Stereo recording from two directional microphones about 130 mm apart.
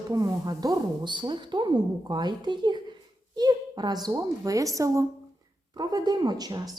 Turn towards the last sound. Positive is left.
turn(degrees=-30)  # may be behind; listen again after turning